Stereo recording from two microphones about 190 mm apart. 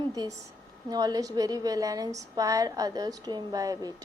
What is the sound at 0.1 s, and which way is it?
A woman's voice, 20° right (ahead or behind).